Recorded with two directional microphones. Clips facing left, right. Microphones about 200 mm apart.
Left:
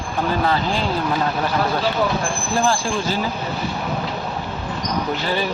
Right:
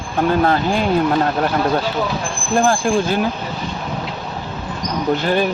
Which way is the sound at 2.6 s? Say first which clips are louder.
Right 6 dB; 55° right (ahead or behind).